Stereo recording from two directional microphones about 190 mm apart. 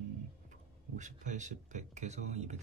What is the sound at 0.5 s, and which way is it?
Speech, 40° right (ahead or behind).